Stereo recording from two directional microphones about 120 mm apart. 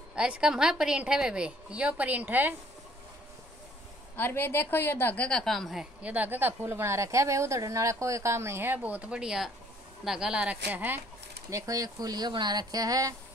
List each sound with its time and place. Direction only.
0.1 s a woman's voice: 5° right (ahead or behind)
4.2 s a woman's voice: 20° left (ahead or behind); by 11.0 s 15° right (ahead or behind)
11.5 s speech: 30° right (ahead or behind)